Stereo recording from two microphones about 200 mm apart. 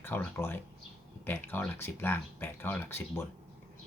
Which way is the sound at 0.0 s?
10° left (ahead or behind).